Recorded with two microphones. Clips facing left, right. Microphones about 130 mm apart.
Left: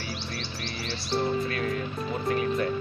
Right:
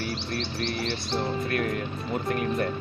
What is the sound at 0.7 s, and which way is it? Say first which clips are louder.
Music: right 6 dB; 55° right (ahead or behind).